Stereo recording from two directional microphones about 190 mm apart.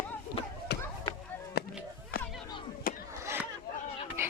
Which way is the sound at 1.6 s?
60° left (ahead or behind).